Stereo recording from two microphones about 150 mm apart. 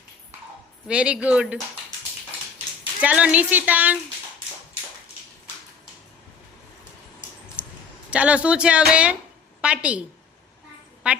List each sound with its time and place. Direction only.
0.9 s speech: 5° right (ahead or behind)
3.0 s speech: 10° right (ahead or behind)
7.6 s a sound: 10° right (ahead or behind)
8.1 s a woman's voice: 10° right (ahead or behind)
11.1 s a woman's voice: 10° right (ahead or behind)